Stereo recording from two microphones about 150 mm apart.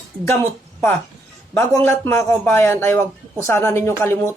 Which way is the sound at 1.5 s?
15° left (ahead or behind).